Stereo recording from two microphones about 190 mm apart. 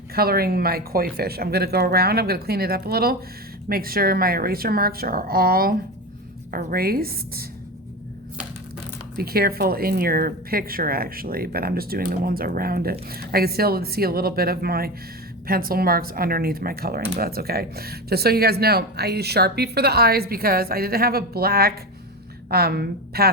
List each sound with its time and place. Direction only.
0.1 s speech: 55° right (ahead or behind)
9.1 s speech: 55° right (ahead or behind)